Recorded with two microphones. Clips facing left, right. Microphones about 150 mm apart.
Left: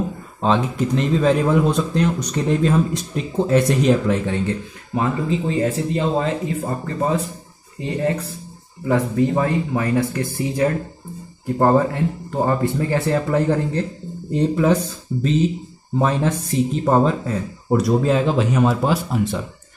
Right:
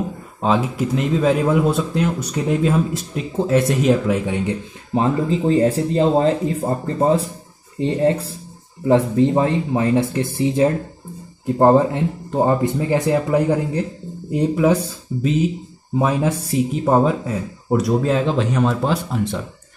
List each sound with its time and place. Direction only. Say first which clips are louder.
0.4 s speech: even; 5° right (ahead or behind)
4.9 s speech: right 3 dB; 30° right (ahead or behind); by 19.4 s 5° left (ahead or behind)